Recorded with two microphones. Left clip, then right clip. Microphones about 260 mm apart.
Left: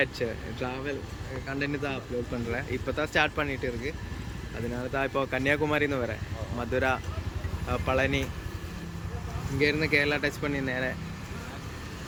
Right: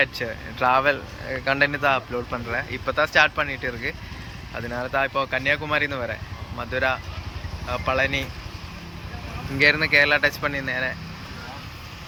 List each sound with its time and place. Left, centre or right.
0.0 s speech: centre
9.6 s speech: centre